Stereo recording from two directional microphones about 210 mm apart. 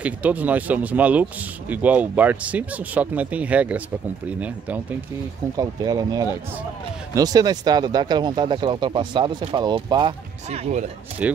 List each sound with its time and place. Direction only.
0.0 s speech: 5° right (ahead or behind)
5.6 s speech: 15° right (ahead or behind)